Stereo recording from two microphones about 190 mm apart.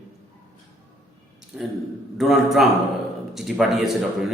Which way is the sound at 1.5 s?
5° right (ahead or behind).